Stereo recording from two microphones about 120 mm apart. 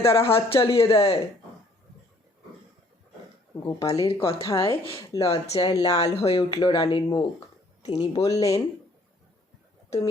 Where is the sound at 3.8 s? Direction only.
55° left (ahead or behind).